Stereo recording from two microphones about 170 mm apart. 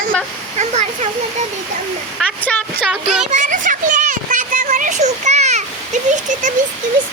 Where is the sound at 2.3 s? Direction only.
10° left (ahead or behind).